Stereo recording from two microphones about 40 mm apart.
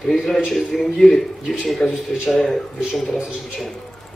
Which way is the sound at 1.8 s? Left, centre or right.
Left.